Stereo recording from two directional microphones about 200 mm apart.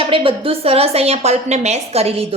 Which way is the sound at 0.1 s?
25° right (ahead or behind).